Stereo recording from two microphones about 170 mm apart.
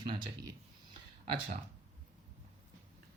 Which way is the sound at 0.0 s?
25° right (ahead or behind).